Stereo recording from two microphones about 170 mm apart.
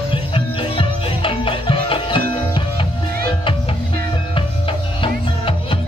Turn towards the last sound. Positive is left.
turn(degrees=30)  # may be behind; listen again after turning